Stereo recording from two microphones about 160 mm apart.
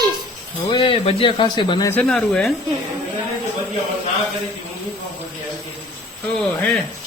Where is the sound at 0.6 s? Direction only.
30° left (ahead or behind).